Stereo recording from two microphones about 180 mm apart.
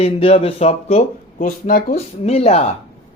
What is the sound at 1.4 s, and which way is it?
Speech, 50° left (ahead or behind).